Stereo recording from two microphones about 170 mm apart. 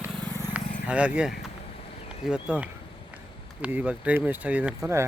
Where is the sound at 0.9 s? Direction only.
5° right (ahead or behind).